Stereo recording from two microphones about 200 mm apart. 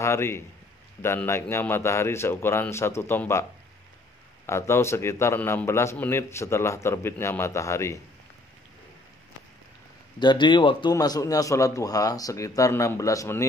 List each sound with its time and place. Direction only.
0.0 s a man's voice: 15° left (ahead or behind)
4.5 s a man's voice: 15° left (ahead or behind)
10.1 s a man's voice: 20° left (ahead or behind)